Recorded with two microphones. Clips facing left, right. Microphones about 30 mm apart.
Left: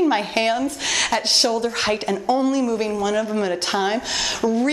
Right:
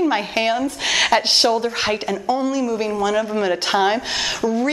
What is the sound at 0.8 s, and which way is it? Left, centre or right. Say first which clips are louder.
Speech: right 6 dB; centre.